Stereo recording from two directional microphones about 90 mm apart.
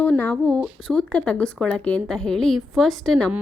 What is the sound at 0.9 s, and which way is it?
A woman's voice, 10° left (ahead or behind).